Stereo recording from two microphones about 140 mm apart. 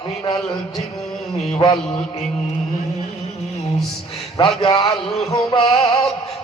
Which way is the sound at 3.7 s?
Centre (ahead or behind).